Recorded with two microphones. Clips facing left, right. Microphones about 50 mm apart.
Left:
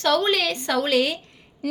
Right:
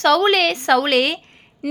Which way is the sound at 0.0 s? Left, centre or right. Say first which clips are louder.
Right 6 dB; right.